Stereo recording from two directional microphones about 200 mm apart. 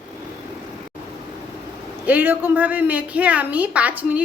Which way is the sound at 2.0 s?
10° right (ahead or behind).